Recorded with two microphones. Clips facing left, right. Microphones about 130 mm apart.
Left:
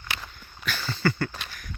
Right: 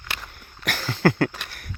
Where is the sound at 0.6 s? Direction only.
90° right; by 1.7 s 65° right (ahead or behind).